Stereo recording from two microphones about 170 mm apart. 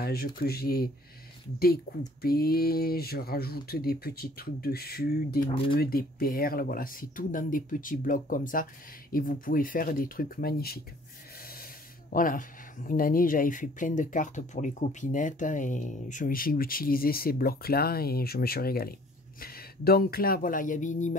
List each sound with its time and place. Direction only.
0.0 s speech: 65° left (ahead or behind)
1.9 s speech: 70° left (ahead or behind)
12.1 s speech: 55° left (ahead or behind)